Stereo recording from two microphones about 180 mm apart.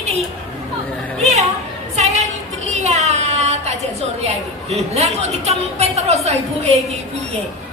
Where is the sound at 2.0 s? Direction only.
40° right (ahead or behind).